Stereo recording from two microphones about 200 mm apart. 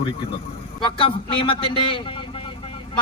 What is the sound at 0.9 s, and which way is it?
A man's voice, 25° left (ahead or behind).